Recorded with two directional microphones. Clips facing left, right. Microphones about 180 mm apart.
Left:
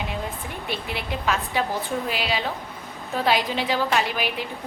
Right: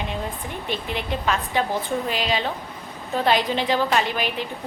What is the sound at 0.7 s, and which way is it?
Speech, 5° left (ahead or behind).